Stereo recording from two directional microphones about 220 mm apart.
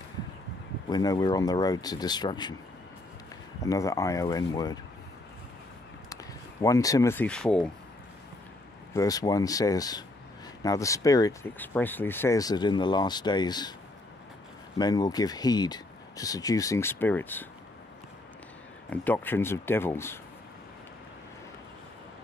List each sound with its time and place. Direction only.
0.8 s speech: 20° left (ahead or behind)
3.6 s speech: 15° left (ahead or behind)
6.6 s speech: 15° left (ahead or behind)
8.9 s speech: 15° left (ahead or behind)
14.8 s speech: 15° left (ahead or behind)
18.9 s speech: 5° left (ahead or behind)